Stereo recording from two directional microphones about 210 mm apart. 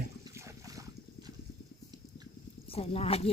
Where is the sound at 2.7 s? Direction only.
30° left (ahead or behind).